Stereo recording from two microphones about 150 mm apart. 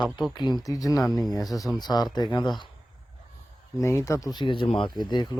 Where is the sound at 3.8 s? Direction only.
20° left (ahead or behind).